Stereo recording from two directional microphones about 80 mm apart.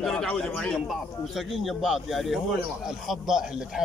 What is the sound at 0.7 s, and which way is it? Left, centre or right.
A man's voice, centre.